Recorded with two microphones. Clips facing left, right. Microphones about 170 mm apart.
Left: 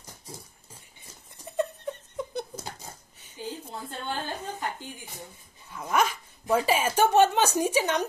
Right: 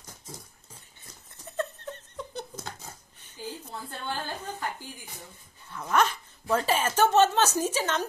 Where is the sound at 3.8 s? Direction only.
15° left (ahead or behind).